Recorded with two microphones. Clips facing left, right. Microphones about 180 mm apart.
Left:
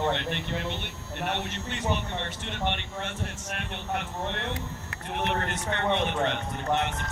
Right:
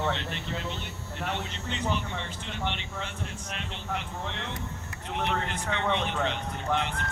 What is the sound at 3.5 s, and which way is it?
Speech, 55° left (ahead or behind).